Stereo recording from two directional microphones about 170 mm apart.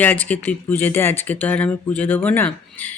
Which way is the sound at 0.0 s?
10° left (ahead or behind).